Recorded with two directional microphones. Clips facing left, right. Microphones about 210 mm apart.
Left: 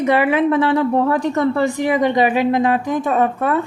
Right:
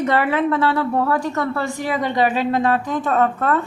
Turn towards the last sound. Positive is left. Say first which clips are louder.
# left 1 dB
turn(degrees=10)  # may be behind; listen again after turning